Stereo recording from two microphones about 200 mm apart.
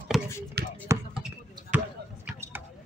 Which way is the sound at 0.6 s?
55° right (ahead or behind).